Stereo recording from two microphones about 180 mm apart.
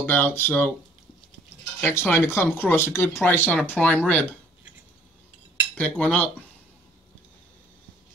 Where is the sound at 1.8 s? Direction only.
15° left (ahead or behind).